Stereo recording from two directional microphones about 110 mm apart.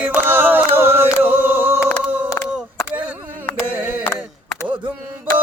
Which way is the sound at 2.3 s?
25° left (ahead or behind).